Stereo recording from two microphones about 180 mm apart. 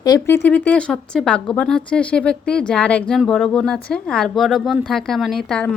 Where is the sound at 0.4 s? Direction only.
10° left (ahead or behind).